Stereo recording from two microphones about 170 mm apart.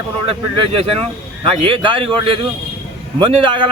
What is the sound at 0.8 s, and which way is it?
Speech, 35° right (ahead or behind).